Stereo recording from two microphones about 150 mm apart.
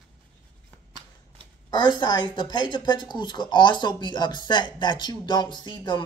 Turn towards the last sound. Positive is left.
turn(degrees=30)  # may be behind; listen again after turning